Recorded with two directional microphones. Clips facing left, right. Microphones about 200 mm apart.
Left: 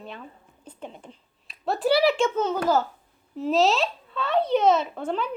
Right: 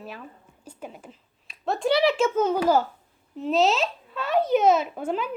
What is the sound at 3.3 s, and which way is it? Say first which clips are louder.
A child's voice: even; centre (ahead or behind).